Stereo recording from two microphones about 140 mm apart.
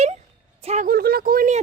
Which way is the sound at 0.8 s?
90° right.